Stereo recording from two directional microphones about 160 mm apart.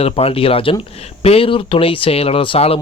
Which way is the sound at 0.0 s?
35° left (ahead or behind).